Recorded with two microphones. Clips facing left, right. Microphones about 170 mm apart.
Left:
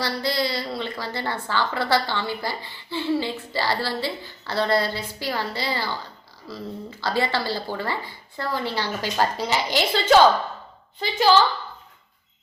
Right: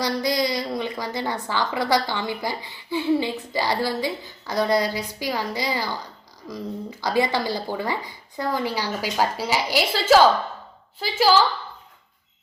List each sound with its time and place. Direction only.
0.0 s a woman's voice: 15° right (ahead or behind)
7.0 s a woman's voice: 15° right (ahead or behind)